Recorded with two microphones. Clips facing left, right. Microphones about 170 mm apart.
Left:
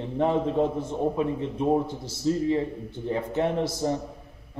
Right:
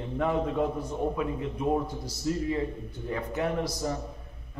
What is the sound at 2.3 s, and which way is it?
A man's voice, 25° left (ahead or behind).